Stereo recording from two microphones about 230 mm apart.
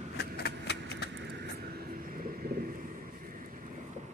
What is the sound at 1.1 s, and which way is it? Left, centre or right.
Vehicle, right.